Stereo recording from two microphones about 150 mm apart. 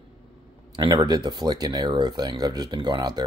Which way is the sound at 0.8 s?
30° right (ahead or behind).